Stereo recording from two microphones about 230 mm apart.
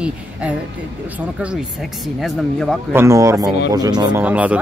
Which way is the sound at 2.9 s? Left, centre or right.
Centre.